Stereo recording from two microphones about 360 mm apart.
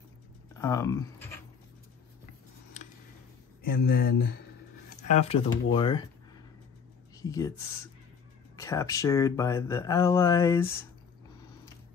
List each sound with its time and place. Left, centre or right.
0.6 s speech: centre
3.6 s speech: left
7.2 s speech: centre